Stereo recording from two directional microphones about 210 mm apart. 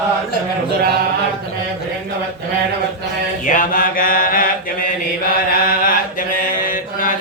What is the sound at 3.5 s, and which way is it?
Mantra, 40° left (ahead or behind).